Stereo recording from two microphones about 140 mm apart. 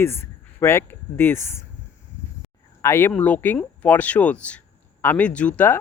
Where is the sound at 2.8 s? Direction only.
20° left (ahead or behind).